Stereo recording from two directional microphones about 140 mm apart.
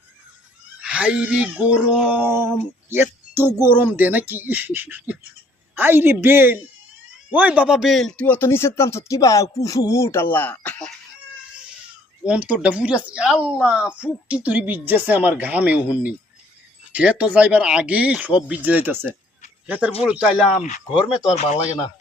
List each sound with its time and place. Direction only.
0.8 s a man's voice: 10° right (ahead or behind); by 10.9 s 10° left (ahead or behind)
12.2 s speech: 10° right (ahead or behind)
20.6 s speech: 55° left (ahead or behind)
21.1 s speech: 5° right (ahead or behind)